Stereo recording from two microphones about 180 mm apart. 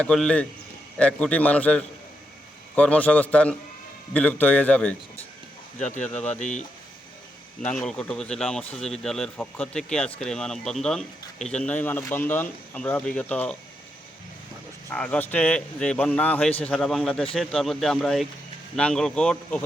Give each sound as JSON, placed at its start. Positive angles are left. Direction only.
{"t": 0.0, "sound": "speech", "side_deg": 5}
{"t": 6.0, "sound": "speech", "side_deg": 5}
{"t": 6.4, "sound": "speech", "side_deg": 40}
{"t": 7.6, "sound": "speech", "side_deg": 5}
{"t": 14.8, "sound": "speech", "side_deg": 5}